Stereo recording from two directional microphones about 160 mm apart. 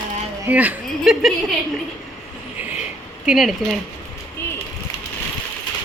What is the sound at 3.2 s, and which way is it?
Speech, 5° right (ahead or behind).